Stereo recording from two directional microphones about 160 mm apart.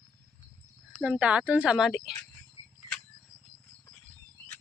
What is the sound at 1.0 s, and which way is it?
A woman's voice, 5° right (ahead or behind).